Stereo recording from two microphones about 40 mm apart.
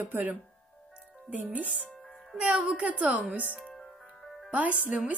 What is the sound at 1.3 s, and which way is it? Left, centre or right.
A woman's voice, right.